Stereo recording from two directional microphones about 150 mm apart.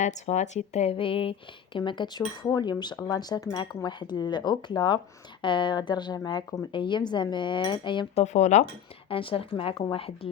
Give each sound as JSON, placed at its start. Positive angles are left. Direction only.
{"t": 0.0, "sound": "speech", "side_deg": 50}
{"t": 5.4, "sound": "cutlery", "side_deg": 30}
{"t": 8.1, "sound": "speech", "side_deg": 50}
{"t": 9.0, "sound": "cutlery", "side_deg": 35}